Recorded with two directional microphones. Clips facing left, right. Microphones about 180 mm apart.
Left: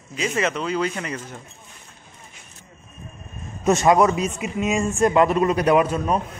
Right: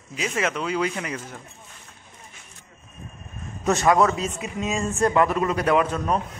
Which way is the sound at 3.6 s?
20° left (ahead or behind).